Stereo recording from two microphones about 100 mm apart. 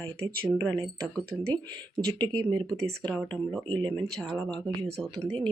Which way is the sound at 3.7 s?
50° right (ahead or behind).